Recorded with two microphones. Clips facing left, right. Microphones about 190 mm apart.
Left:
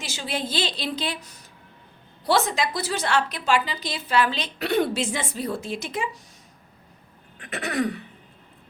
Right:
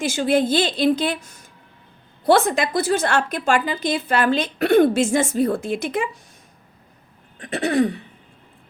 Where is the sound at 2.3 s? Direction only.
55° right (ahead or behind).